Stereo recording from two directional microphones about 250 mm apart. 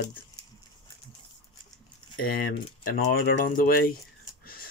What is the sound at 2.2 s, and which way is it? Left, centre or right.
Speech, left.